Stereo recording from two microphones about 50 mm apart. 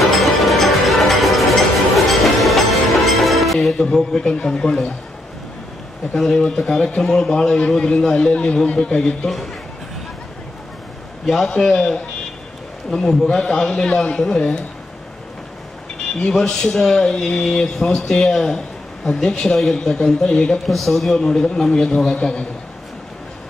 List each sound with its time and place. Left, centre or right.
0.2 s music: centre
3.7 s a man's voice: centre
6.1 s speech: centre
11.2 s speech: centre
16.3 s speech: centre
20.5 s a man's voice: centre